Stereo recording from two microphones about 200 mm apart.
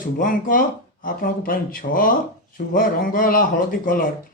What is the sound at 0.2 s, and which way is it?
A man's voice, 45° left (ahead or behind).